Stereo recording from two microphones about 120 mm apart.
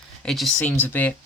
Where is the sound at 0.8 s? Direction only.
15° left (ahead or behind).